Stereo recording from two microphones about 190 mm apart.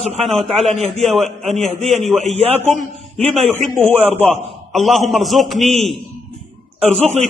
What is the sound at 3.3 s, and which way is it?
A man's voice, centre (ahead or behind).